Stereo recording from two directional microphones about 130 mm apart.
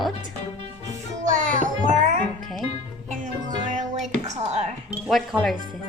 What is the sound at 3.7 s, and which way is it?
Music, 75° right (ahead or behind).